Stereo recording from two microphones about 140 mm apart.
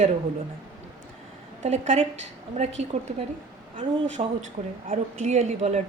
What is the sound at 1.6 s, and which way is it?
A woman's voice, 55° right (ahead or behind).